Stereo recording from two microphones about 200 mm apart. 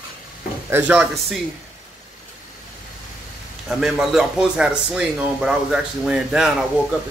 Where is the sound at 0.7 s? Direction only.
10° right (ahead or behind).